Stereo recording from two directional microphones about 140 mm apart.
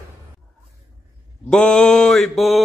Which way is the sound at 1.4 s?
5° left (ahead or behind).